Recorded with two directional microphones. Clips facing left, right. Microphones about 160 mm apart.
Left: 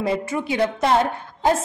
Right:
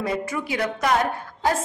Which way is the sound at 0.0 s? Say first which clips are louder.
Left 3 dB; 25° left (ahead or behind).